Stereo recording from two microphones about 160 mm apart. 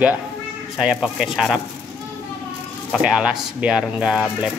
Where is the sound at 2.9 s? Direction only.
5° right (ahead or behind).